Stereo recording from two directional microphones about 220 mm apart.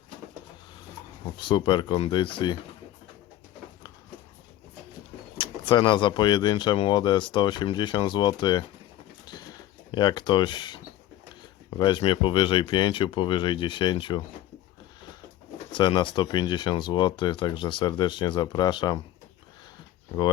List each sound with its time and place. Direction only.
1.4 s speech: 20° left (ahead or behind)
5.4 s speech: 20° left (ahead or behind)
9.9 s speech: 20° left (ahead or behind)
11.8 s speech: 20° left (ahead or behind)
15.7 s speech: 20° left (ahead or behind)